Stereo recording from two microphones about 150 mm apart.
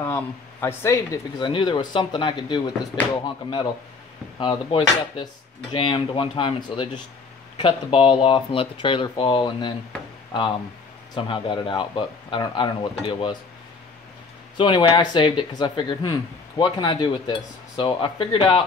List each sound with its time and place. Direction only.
0.0 s speech: 15° left (ahead or behind)
1.4 s speech: 35° left (ahead or behind)
11.1 s speech: 35° left (ahead or behind)
14.6 s speech: 30° left (ahead or behind)